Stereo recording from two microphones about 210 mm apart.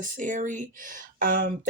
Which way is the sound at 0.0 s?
40° right (ahead or behind).